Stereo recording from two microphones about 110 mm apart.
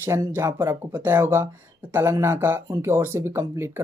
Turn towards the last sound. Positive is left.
turn(degrees=-25)  # may be behind; listen again after turning